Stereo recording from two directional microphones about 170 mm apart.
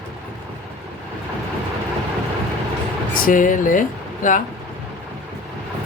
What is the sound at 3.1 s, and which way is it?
Speech, 50° left (ahead or behind).